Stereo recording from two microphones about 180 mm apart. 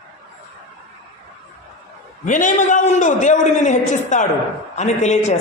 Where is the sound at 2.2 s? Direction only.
45° left (ahead or behind).